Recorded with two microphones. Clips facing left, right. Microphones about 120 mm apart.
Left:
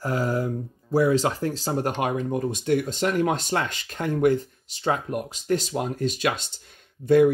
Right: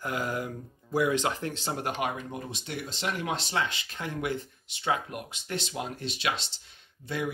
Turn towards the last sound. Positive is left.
turn(degrees=45)  # may be behind; listen again after turning